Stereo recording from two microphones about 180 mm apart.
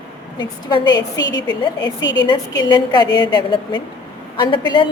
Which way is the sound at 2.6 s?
25° left (ahead or behind).